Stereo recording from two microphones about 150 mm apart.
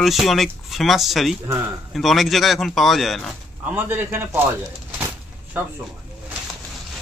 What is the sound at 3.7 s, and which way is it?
Speech, 15° right (ahead or behind).